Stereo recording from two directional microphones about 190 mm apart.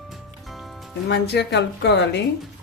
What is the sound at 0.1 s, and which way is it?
Music, centre (ahead or behind).